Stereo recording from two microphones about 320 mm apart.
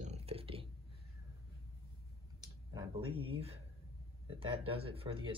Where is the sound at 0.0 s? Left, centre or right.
Centre.